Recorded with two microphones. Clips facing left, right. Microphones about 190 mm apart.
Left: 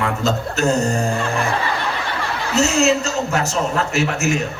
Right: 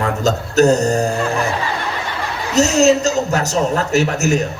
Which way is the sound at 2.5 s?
40° right (ahead or behind).